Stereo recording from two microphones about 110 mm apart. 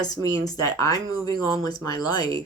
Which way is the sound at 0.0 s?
35° left (ahead or behind).